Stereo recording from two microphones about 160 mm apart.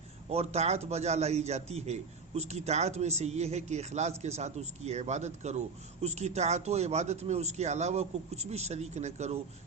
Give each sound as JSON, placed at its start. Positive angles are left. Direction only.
{"t": 0.3, "sound": "speech", "side_deg": -40}